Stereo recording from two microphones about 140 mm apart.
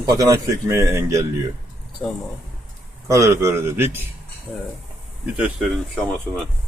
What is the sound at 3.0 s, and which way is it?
Speech, 20° right (ahead or behind).